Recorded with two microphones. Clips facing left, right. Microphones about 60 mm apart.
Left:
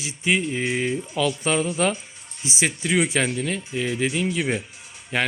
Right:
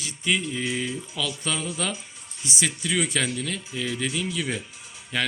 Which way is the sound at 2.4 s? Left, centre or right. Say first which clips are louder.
Left 4 dB; left.